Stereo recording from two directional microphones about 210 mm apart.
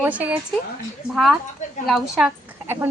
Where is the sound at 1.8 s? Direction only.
Centre (ahead or behind).